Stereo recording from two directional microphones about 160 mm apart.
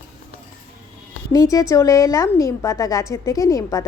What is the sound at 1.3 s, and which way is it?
A woman's voice, 20° left (ahead or behind).